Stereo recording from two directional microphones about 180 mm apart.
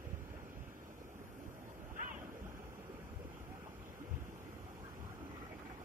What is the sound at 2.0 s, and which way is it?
Waves, 50° right (ahead or behind).